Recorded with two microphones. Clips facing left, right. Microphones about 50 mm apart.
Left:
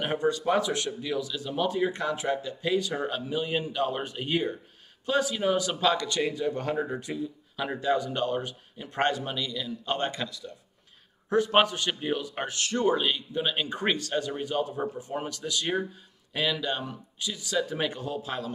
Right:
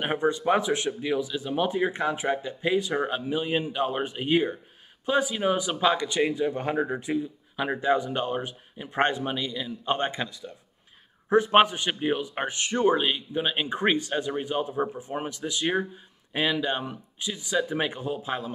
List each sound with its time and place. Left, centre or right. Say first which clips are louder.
0.0 s a man's voice: right 1 dB; right